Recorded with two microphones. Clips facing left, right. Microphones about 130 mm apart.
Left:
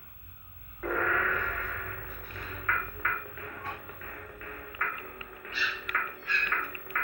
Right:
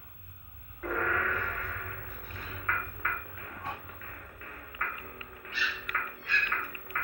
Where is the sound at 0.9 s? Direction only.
35° right (ahead or behind).